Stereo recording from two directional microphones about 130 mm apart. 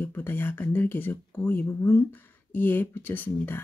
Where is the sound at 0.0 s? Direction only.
15° left (ahead or behind).